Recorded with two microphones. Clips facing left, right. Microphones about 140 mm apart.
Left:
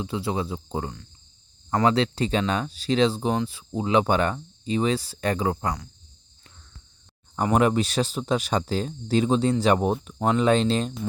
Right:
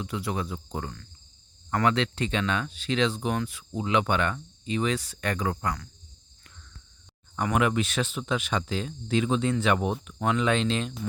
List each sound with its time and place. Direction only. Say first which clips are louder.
0.0 s speech: left 4 dB; 25° left (ahead or behind)
7.3 s speech: left 4 dB; 35° left (ahead or behind)